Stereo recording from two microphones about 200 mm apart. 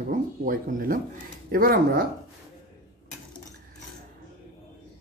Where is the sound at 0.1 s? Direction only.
45° right (ahead or behind).